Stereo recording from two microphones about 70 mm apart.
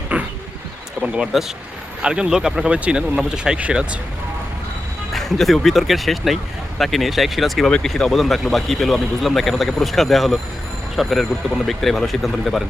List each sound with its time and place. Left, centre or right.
0.1 s a sound: centre
1.0 s speech: centre
5.1 s speech: centre